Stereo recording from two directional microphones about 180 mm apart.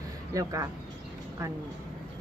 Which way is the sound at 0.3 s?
20° right (ahead or behind).